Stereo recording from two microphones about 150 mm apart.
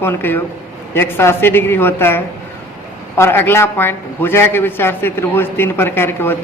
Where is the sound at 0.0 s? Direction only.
15° left (ahead or behind).